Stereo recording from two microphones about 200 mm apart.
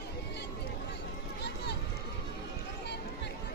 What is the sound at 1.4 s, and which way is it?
Run, 55° left (ahead or behind).